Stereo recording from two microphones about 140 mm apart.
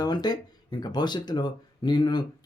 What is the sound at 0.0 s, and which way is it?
Speech, 30° left (ahead or behind).